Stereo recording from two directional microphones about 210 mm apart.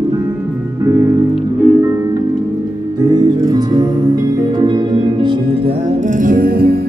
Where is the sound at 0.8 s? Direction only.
15° right (ahead or behind); by 6.8 s 50° right (ahead or behind).